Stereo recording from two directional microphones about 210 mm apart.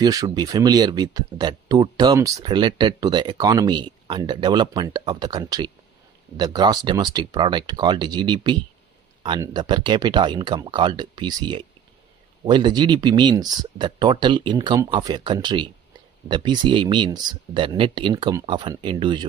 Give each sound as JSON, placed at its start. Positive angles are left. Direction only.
{"t": 0.0, "sound": "speech", "side_deg": -20}